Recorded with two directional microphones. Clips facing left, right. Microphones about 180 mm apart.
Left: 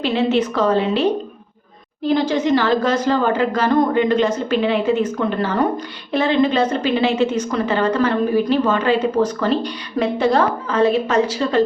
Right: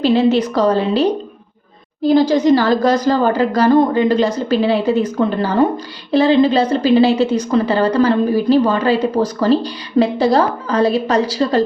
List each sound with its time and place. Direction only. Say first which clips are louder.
0.0 s a woman's voice: right 4 dB; 35° right (ahead or behind)